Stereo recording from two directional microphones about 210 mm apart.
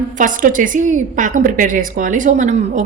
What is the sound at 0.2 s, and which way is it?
A woman's voice, 40° right (ahead or behind).